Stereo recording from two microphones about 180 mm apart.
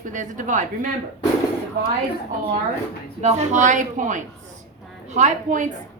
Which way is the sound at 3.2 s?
40° right (ahead or behind).